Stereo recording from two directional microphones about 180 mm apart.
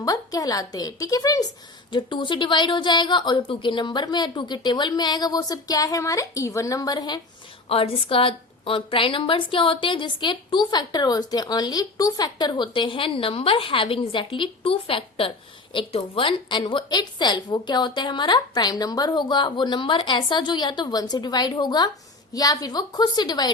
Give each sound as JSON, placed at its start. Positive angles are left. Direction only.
{"t": 0.0, "sound": "a woman's voice", "side_deg": 20}